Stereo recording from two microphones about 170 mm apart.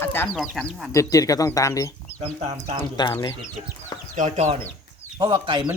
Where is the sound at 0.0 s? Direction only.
10° left (ahead or behind).